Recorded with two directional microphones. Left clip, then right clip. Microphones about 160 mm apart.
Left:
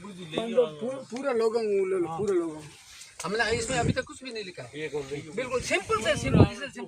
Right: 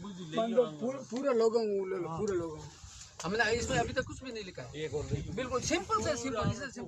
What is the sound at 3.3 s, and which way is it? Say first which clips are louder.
Speech: left 3 dB; 20° left (ahead or behind).